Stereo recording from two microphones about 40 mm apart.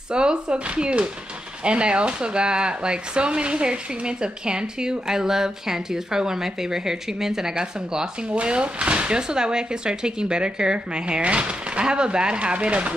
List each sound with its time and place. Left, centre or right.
0.1 s speech: right